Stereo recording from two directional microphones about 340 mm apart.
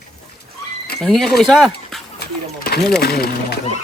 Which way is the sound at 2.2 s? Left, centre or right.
Left.